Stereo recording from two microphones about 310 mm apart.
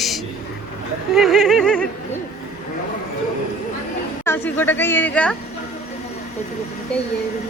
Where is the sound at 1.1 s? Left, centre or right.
Centre.